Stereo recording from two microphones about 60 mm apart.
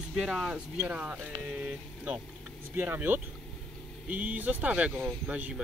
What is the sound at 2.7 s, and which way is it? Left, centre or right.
Speech, right.